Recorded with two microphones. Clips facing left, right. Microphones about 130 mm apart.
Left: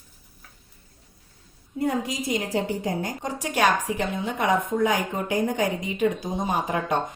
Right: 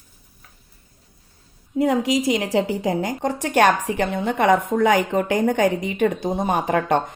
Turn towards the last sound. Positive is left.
turn(degrees=-65)  # may be behind; listen again after turning